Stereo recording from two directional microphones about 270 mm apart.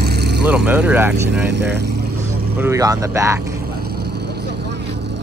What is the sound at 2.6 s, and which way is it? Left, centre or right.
Speech, centre.